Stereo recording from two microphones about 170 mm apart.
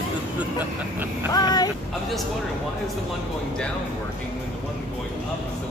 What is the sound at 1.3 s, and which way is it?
Speech, 25° left (ahead or behind).